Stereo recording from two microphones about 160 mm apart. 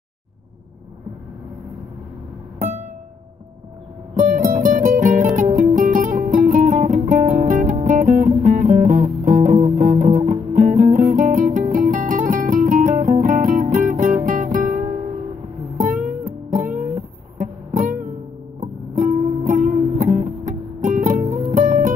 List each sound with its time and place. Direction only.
4.1 s music: 55° right (ahead or behind)